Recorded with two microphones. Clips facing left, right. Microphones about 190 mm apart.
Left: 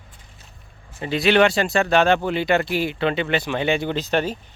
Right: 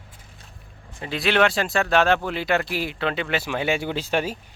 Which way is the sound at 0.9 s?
Centre (ahead or behind).